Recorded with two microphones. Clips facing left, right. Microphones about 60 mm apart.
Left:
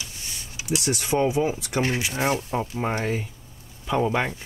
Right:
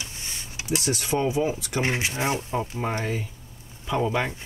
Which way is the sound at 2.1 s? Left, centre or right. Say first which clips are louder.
Left 2 dB; left.